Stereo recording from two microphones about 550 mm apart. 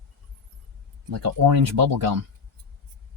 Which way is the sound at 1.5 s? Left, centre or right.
Right.